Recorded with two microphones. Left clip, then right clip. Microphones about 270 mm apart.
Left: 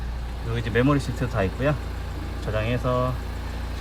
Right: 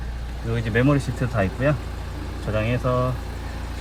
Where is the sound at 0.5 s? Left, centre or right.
Centre.